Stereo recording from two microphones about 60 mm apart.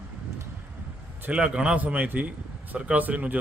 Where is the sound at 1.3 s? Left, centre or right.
Right.